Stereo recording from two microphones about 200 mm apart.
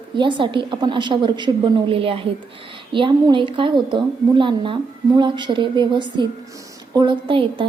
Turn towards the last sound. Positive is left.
turn(degrees=-25)  # may be behind; listen again after turning